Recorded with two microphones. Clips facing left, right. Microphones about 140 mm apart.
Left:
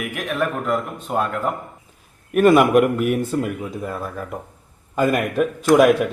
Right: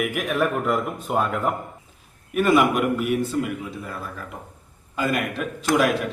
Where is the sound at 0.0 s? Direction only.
Centre (ahead or behind).